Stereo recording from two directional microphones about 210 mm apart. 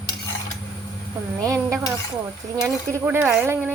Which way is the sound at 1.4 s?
15° right (ahead or behind).